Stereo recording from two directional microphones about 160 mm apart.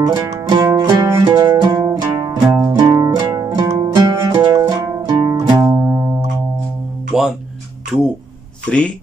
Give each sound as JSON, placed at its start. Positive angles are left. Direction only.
{"t": 0.0, "sound": "music", "side_deg": -25}
{"t": 2.4, "sound": "music", "side_deg": -10}
{"t": 2.8, "sound": "music", "side_deg": -25}
{"t": 7.1, "sound": "music", "side_deg": -5}
{"t": 7.9, "sound": "speech", "side_deg": -5}
{"t": 8.6, "sound": "speech", "side_deg": 5}